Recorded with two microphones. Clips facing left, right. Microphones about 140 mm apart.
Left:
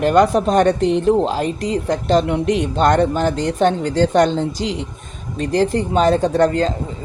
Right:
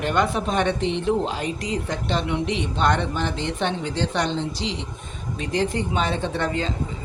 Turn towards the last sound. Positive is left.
turn(degrees=40)  # may be behind; listen again after turning